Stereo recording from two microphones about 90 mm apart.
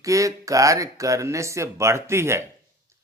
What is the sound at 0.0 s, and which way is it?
Speech, 35° right (ahead or behind).